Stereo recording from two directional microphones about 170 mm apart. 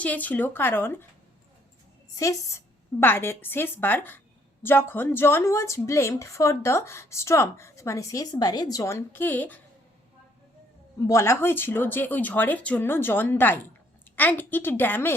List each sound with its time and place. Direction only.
0.0 s a woman's voice: 10° left (ahead or behind)
2.1 s a woman's voice: 20° left (ahead or behind)
11.0 s a woman's voice: 15° left (ahead or behind)